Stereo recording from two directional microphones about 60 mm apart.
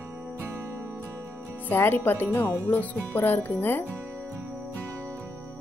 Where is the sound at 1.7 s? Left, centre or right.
Left.